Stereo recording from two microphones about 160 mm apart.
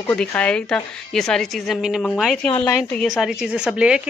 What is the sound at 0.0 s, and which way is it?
Speech, 10° left (ahead or behind).